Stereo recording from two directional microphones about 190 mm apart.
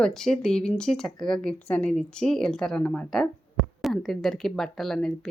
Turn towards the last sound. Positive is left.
turn(degrees=0)  # may be behind; listen again after turning